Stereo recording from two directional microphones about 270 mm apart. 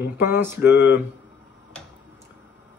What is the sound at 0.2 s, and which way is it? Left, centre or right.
Speech, centre.